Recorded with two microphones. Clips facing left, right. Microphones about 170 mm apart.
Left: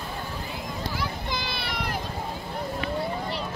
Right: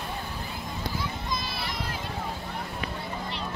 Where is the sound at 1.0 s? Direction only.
70° left (ahead or behind).